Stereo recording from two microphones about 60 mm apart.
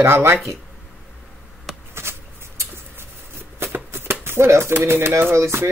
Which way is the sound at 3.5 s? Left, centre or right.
Right.